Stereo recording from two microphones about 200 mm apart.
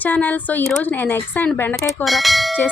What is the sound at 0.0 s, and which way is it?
Bell, 10° left (ahead or behind).